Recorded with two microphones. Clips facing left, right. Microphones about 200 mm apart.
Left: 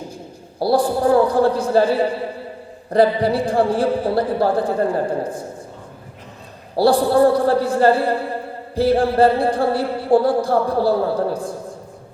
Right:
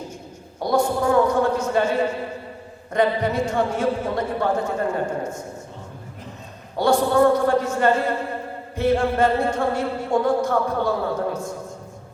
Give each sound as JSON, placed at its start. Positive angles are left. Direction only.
{"t": 0.6, "sound": "speech", "side_deg": 35}
{"t": 6.7, "sound": "speech", "side_deg": 35}